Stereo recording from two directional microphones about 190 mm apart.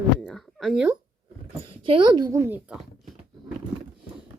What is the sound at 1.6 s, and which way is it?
Speech, 30° right (ahead or behind).